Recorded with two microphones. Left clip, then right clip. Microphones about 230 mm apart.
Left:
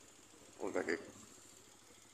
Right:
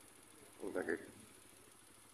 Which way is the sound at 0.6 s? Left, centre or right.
Centre.